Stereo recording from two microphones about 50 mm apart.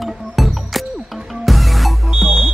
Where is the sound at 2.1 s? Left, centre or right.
Centre.